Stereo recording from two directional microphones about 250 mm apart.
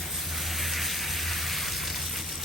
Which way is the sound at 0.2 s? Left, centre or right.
Centre.